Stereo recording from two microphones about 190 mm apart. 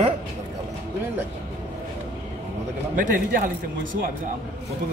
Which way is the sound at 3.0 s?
45° right (ahead or behind).